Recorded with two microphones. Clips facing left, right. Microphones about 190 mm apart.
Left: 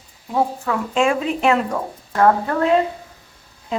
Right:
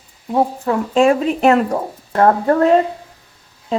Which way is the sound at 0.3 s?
35° right (ahead or behind).